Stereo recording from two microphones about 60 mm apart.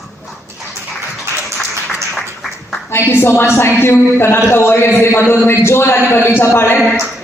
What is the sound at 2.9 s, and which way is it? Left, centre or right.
A man's voice, left.